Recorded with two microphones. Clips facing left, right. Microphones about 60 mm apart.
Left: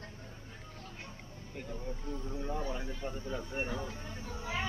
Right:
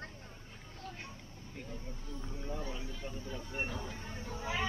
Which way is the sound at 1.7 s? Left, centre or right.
Left.